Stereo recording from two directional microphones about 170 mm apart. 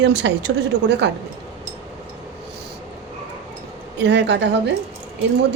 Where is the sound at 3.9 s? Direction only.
90° right.